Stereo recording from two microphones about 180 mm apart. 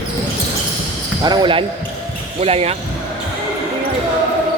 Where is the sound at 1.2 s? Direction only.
25° right (ahead or behind).